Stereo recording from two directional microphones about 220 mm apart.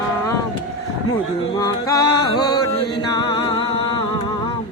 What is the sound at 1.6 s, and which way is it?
Music, 20° left (ahead or behind).